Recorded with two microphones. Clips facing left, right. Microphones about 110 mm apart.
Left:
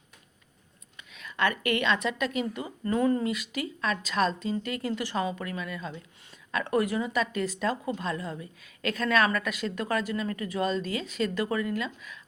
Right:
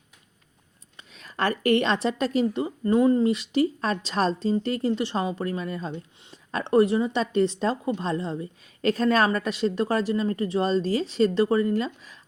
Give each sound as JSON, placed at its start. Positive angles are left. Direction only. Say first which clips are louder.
{"t": 0.9, "sound": "a woman's voice", "louder": "right 2 dB", "side_deg": -35}